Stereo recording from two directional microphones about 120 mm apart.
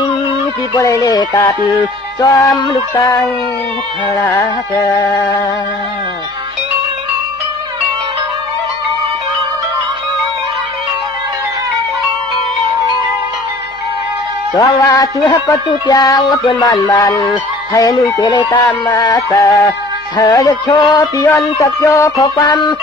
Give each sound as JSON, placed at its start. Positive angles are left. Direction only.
{"t": 0.7, "sound": "music", "side_deg": 30}
{"t": 2.5, "sound": "music", "side_deg": 40}
{"t": 2.9, "sound": "music", "side_deg": 20}
{"t": 14.5, "sound": "music", "side_deg": 30}